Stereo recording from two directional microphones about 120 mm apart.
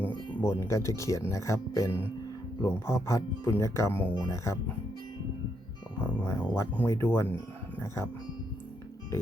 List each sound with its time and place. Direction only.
0.4 s speech: 20° left (ahead or behind)
6.0 s music: 20° left (ahead or behind)
6.7 s speech: 20° left (ahead or behind)